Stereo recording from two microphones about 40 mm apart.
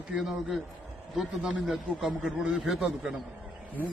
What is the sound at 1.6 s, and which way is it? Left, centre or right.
A man's voice, centre.